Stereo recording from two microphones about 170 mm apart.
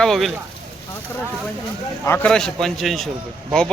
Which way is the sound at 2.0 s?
10° left (ahead or behind).